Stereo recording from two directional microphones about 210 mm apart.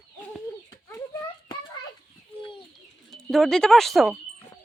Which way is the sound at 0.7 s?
15° left (ahead or behind).